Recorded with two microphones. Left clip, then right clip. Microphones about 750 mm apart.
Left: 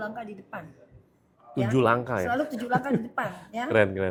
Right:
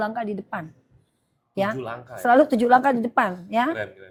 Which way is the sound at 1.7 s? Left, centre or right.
Left.